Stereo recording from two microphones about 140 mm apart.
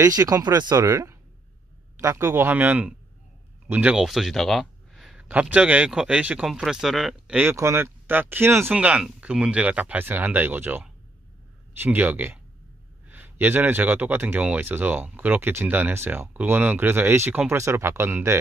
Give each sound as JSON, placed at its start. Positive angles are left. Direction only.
{"t": 0.0, "sound": "speech", "side_deg": -25}